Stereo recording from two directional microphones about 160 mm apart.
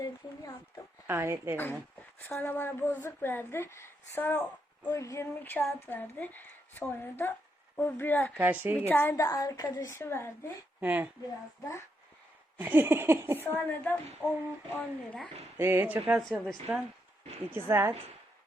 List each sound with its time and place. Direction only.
0.0 s a sound: 20° left (ahead or behind)
1.0 s speech: 15° right (ahead or behind)
2.2 s a woman's voice: 10° left (ahead or behind)
8.4 s speech: 10° right (ahead or behind)
8.9 s a woman's voice: 15° left (ahead or behind)
10.8 s a woman's voice: 10° right (ahead or behind)
12.5 s speech: 10° right (ahead or behind)
13.7 s a woman's voice: 10° left (ahead or behind)
15.5 s a woman's voice: 15° right (ahead or behind)